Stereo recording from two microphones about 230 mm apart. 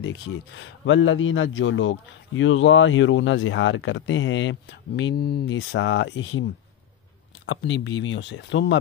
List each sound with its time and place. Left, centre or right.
0.0 s a man's voice: left
7.4 s speech: left